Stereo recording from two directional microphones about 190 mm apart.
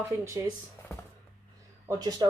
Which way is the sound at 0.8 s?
15° left (ahead or behind).